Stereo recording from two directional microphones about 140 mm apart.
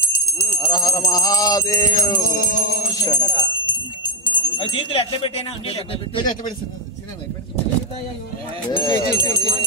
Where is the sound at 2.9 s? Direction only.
30° left (ahead or behind).